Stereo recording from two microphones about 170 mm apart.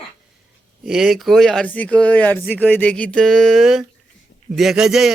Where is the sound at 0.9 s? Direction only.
Centre (ahead or behind).